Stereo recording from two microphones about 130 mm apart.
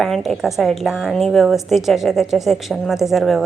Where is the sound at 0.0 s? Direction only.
Centre (ahead or behind).